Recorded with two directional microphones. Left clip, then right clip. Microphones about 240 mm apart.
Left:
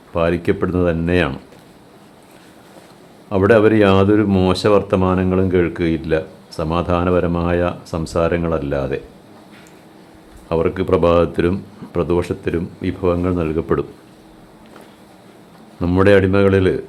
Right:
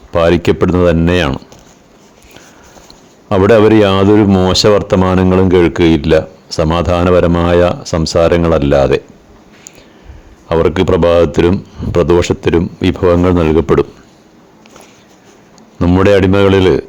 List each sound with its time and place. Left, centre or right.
0.1 s speech: right
3.2 s speech: right
10.5 s speech: right
15.9 s speech: right